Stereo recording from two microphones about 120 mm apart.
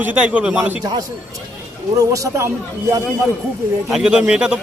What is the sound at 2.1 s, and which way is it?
Speech, 25° right (ahead or behind).